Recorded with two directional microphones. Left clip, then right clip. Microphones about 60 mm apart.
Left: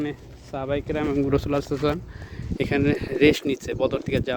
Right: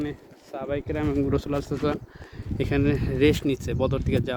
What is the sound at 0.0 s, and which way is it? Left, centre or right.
Speech, left.